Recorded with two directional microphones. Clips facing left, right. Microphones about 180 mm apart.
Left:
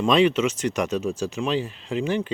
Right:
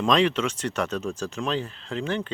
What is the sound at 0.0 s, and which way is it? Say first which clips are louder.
Speech: left 3 dB; 5° left (ahead or behind).